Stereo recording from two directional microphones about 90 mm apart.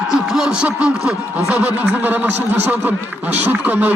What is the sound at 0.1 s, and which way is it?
Speech, 5° right (ahead or behind).